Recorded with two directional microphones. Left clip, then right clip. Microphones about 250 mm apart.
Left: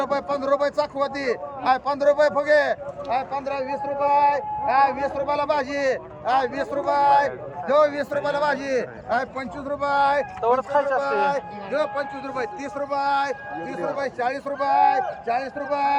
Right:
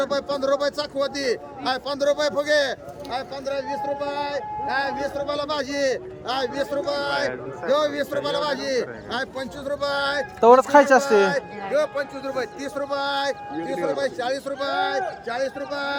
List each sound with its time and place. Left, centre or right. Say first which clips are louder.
0.0 s a man's voice: even; centre
10.4 s speech: right 10 dB; right
11.0 s a man's voice: right 3 dB; centre